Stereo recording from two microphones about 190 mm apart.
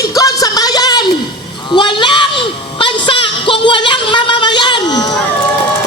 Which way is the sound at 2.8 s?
25° left (ahead or behind).